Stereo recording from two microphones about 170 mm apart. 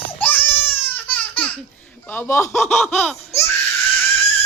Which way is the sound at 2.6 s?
10° left (ahead or behind).